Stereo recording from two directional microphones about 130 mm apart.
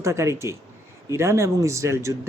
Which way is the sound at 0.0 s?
20° right (ahead or behind).